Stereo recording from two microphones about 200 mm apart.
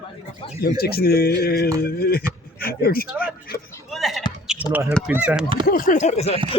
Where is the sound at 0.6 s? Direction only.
50° left (ahead or behind).